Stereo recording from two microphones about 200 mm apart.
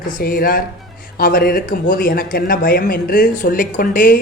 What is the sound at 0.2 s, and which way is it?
Speech, 50° left (ahead or behind).